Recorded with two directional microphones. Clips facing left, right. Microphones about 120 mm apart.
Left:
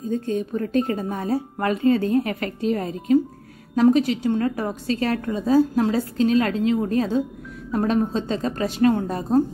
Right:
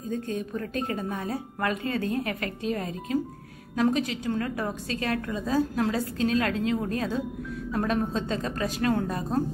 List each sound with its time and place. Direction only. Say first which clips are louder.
0.1 s a woman's voice: left 6 dB; 30° left (ahead or behind)